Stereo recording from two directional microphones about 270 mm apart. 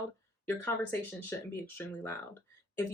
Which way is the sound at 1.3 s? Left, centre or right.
Centre.